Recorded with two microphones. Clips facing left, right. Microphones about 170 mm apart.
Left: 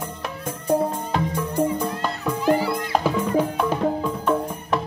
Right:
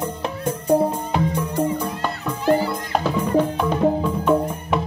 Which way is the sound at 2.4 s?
10° left (ahead or behind).